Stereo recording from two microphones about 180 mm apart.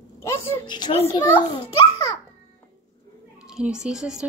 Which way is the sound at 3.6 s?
5° right (ahead or behind).